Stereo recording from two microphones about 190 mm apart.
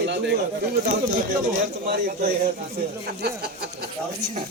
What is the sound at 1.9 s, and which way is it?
Speech, 55° right (ahead or behind).